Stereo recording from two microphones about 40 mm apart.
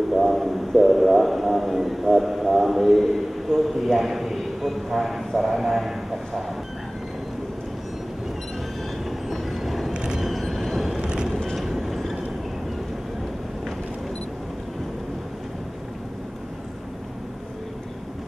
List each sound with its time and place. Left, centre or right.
0.2 s a sound: centre
9.3 s vehicle: centre
9.9 s vehicle: right
10.2 s vehicle: centre
11.0 s vehicle: right
11.5 s vehicle: centre